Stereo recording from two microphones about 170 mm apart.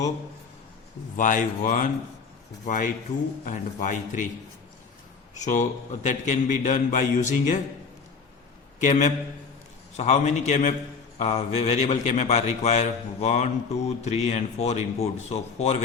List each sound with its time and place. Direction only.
1.1 s a man's voice: 50° left (ahead or behind)
5.3 s a man's voice: 45° left (ahead or behind)
8.8 s a man's voice: 45° left (ahead or behind)